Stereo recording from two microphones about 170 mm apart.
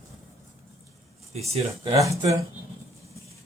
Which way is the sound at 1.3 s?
35° right (ahead or behind).